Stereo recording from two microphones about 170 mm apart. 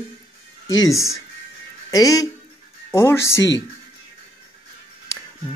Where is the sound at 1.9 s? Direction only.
20° left (ahead or behind).